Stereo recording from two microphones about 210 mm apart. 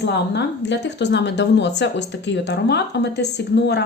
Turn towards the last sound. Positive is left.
turn(degrees=55)  # may be behind; listen again after turning